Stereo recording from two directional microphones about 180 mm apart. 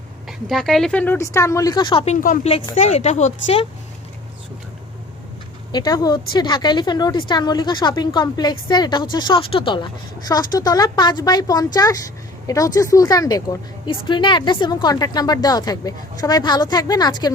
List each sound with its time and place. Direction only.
0.3 s a woman's voice: centre (ahead or behind); by 2.1 s 30° left (ahead or behind)
2.2 s a woman's voice: 50° left (ahead or behind)
2.7 s speech: 35° left (ahead or behind)
5.7 s a woman's voice: 20° left (ahead or behind)